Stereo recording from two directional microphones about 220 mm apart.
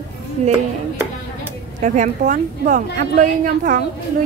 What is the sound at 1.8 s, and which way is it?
A woman's voice, 35° right (ahead or behind).